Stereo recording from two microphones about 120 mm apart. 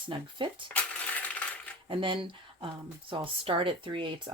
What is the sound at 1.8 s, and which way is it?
Speech, 45° right (ahead or behind).